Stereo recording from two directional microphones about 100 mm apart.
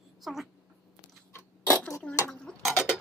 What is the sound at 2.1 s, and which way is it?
Dishes, 10° left (ahead or behind).